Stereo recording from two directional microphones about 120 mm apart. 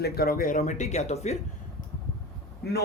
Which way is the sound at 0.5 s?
75° left (ahead or behind).